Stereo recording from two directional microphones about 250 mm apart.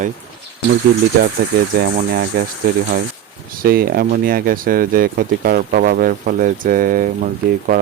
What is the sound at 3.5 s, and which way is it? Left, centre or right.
Speech, right.